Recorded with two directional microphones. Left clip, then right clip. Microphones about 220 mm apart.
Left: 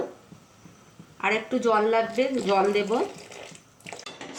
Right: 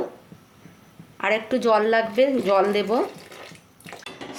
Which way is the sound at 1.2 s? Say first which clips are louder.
Right 3 dB; 50° right (ahead or behind).